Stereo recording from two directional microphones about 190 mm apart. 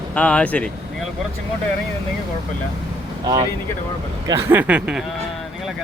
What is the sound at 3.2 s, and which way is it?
Speech, 20° right (ahead or behind).